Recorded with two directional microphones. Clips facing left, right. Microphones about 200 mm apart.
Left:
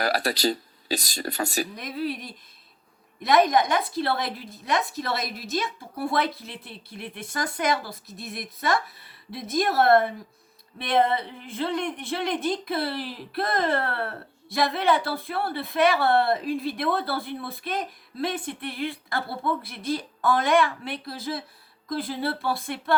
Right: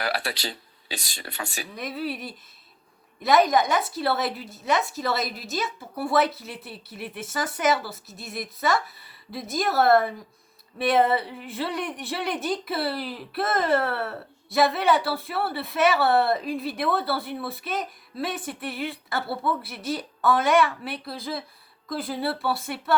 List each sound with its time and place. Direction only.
0.0 s speech: 40° left (ahead or behind)
1.7 s speech: centre (ahead or behind)